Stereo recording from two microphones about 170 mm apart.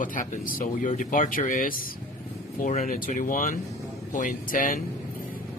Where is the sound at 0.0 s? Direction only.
50° left (ahead or behind).